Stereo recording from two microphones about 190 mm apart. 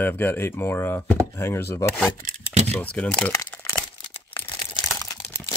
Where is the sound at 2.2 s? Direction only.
35° right (ahead or behind).